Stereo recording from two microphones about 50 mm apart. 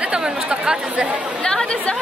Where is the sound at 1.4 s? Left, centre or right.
Centre.